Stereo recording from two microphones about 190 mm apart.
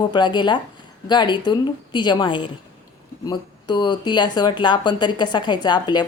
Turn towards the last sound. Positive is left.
turn(degrees=25)  # may be behind; listen again after turning